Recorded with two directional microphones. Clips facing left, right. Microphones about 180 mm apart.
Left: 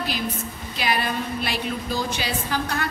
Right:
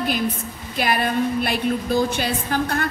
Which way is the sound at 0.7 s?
50° right (ahead or behind).